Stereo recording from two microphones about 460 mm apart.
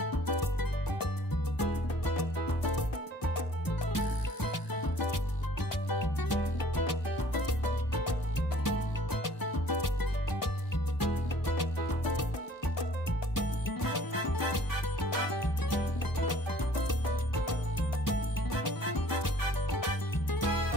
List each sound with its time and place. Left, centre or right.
0.0 s music: left
3.6 s music: left
8.6 s music: left
11.0 s music: left
13.3 s music: left